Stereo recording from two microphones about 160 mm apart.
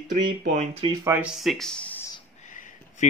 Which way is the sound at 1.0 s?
10° right (ahead or behind).